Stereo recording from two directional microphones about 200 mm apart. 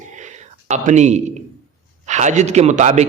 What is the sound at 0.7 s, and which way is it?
Speech, 35° right (ahead or behind).